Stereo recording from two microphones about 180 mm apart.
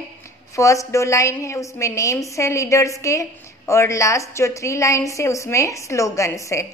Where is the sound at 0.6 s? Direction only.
15° left (ahead or behind).